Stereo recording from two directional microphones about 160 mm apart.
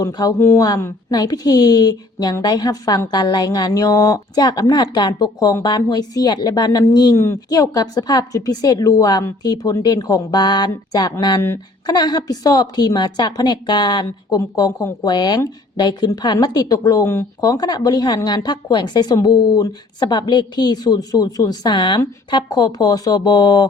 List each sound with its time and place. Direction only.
0.0 s speech: 25° left (ahead or behind)